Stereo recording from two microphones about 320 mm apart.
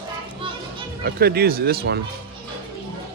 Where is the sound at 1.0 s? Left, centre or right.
Right.